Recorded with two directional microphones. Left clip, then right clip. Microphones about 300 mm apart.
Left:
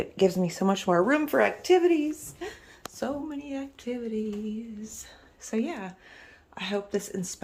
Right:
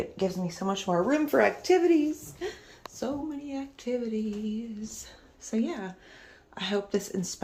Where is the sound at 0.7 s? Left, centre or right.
Centre.